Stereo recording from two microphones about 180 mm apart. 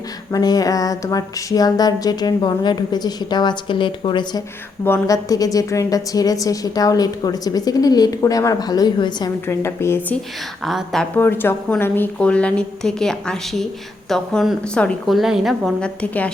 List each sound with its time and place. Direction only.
0.3 s a woman's voice: 20° left (ahead or behind)
10.7 s a woman's voice: centre (ahead or behind)
11.2 s a woman's voice: 10° left (ahead or behind)